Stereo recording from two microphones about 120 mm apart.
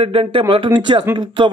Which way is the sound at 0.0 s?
50° right (ahead or behind).